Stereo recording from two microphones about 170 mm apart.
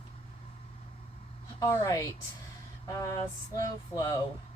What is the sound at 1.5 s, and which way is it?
Speech, 20° left (ahead or behind).